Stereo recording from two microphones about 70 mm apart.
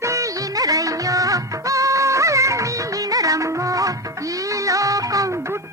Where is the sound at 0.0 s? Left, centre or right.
Right.